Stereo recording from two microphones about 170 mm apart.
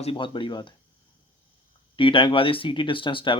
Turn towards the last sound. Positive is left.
turn(degrees=30)  # may be behind; listen again after turning